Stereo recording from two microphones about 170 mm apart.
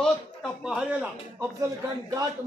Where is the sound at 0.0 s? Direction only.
Centre (ahead or behind).